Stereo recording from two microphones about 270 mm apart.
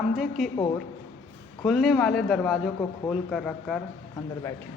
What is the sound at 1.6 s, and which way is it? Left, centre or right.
A man's voice, centre.